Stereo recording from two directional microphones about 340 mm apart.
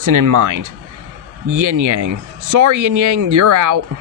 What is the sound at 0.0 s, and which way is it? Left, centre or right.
Speech, right.